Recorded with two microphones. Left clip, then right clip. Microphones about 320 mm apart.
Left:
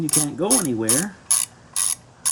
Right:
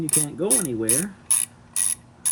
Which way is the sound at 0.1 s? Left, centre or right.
Left.